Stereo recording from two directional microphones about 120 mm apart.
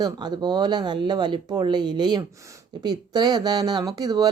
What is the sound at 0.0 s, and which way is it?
Speech, 35° right (ahead or behind).